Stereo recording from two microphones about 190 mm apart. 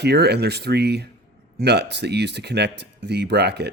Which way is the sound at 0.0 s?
60° right (ahead or behind).